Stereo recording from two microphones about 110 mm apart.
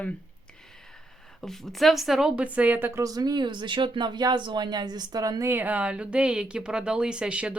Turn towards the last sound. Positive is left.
turn(degrees=-10)  # may be behind; listen again after turning